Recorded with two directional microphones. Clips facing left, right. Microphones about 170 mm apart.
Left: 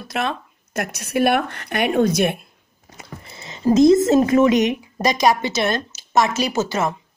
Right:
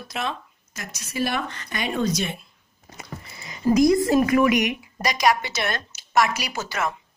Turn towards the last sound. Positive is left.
turn(degrees=25)  # may be behind; listen again after turning